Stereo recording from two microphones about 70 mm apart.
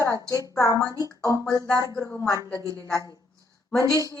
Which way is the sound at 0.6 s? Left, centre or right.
Left.